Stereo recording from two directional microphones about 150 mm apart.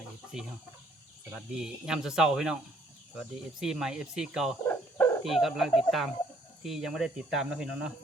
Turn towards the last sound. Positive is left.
turn(degrees=-5)  # may be behind; listen again after turning